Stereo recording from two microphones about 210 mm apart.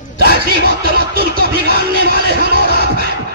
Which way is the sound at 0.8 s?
45° right (ahead or behind).